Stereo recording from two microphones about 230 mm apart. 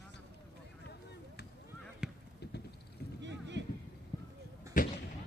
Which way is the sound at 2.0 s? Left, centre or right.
Centre.